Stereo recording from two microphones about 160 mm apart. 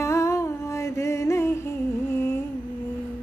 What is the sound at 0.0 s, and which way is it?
Music, 20° left (ahead or behind).